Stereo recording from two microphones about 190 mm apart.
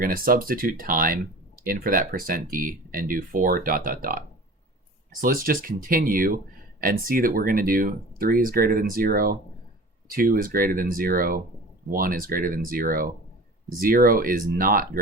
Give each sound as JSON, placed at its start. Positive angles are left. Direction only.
{"t": 0.0, "sound": "speech", "side_deg": -50}
{"t": 5.2, "sound": "speech", "side_deg": -45}